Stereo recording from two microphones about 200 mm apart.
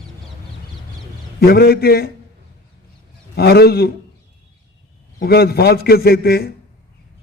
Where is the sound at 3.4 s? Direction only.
50° left (ahead or behind).